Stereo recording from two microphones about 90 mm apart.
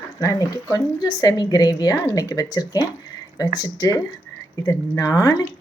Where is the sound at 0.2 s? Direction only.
45° left (ahead or behind).